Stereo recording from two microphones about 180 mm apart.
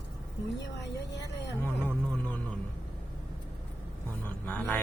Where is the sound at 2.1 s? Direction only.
5° left (ahead or behind).